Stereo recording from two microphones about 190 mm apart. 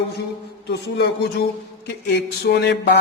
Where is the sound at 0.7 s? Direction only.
60° left (ahead or behind).